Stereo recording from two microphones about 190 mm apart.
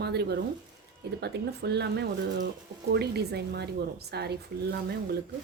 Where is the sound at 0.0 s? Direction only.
60° right (ahead or behind).